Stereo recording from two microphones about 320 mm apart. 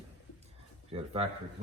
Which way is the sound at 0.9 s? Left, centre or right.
Centre.